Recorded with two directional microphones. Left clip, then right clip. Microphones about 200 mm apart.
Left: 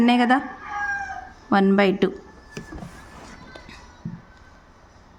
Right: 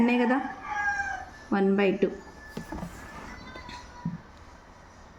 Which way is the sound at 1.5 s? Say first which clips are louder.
Left 6 dB; 40° left (ahead or behind).